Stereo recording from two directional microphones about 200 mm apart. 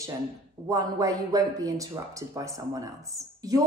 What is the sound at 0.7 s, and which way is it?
A woman's voice, 15° right (ahead or behind).